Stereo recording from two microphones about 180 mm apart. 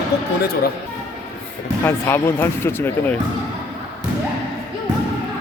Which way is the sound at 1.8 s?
15° left (ahead or behind).